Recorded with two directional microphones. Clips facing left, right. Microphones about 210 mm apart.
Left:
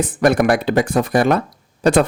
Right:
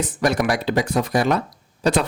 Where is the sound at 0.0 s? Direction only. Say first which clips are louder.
Left 5 dB; 55° left (ahead or behind).